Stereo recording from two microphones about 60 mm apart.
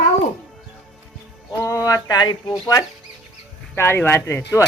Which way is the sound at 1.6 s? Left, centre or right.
Left.